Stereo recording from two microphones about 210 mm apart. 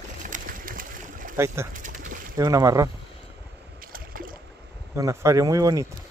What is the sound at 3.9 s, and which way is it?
Boat, 45° right (ahead or behind).